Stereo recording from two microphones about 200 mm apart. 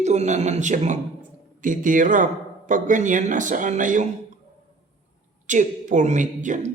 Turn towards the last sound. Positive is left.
turn(degrees=-40)  # may be behind; listen again after turning